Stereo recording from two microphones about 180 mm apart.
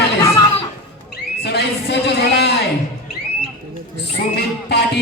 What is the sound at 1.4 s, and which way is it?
A man's voice, 65° left (ahead or behind).